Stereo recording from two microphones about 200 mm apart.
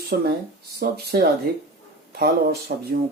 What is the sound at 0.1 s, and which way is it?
Speech, 45° right (ahead or behind).